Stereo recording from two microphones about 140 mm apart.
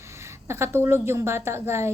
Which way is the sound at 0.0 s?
20° right (ahead or behind).